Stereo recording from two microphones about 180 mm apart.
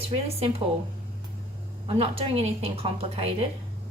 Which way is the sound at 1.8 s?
30° right (ahead or behind).